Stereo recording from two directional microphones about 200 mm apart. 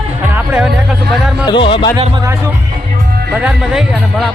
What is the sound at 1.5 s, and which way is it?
Speech, 25° left (ahead or behind).